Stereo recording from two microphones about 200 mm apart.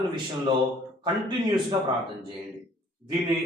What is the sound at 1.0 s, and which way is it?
Speech, 20° right (ahead or behind).